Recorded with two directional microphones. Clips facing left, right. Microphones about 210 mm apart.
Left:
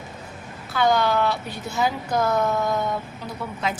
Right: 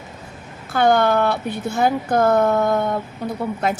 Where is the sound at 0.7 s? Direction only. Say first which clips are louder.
Right 4 dB; 55° right (ahead or behind).